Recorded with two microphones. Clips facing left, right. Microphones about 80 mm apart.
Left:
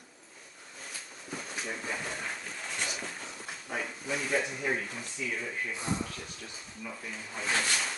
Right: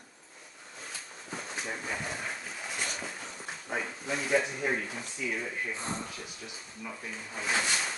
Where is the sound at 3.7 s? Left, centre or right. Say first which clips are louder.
Right 2 dB; right.